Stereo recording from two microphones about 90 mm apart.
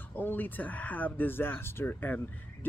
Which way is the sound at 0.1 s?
20° left (ahead or behind).